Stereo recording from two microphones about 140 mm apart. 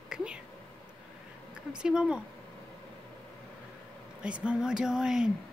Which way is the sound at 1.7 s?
5° right (ahead or behind).